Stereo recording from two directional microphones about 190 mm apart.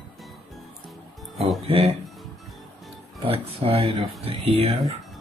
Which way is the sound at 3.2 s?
30° right (ahead or behind).